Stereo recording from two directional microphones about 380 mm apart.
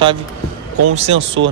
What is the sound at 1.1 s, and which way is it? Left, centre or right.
Speech, right.